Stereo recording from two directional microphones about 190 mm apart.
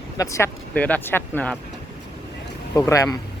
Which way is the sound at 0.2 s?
15° left (ahead or behind).